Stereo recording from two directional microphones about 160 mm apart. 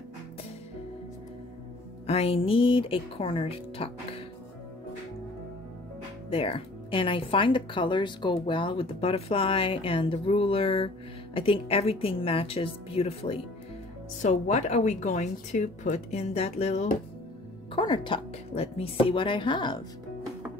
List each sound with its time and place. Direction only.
2.0 s speech: 40° left (ahead or behind)
6.3 s speech: 35° left (ahead or behind)
17.7 s speech: 30° left (ahead or behind)